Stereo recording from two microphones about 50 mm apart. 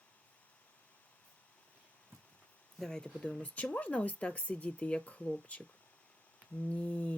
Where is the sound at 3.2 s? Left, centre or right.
Left.